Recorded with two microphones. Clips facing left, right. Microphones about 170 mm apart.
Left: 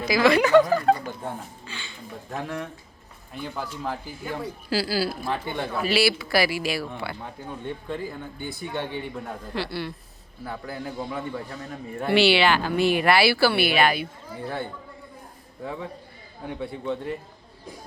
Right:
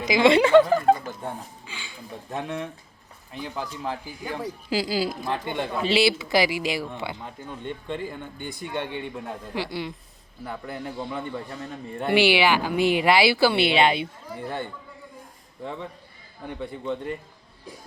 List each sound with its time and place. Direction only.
0.0 s speech: 20° right (ahead or behind)
1.6 s a sound: 10° right (ahead or behind)
2.3 s speech: 20° right (ahead or behind)
7.9 s a man's voice: 5° left (ahead or behind)
8.7 s speech: 15° right (ahead or behind)
10.4 s a man's voice: centre (ahead or behind)
11.9 s speech: 15° right (ahead or behind)
16.5 s a man's voice: 5° left (ahead or behind)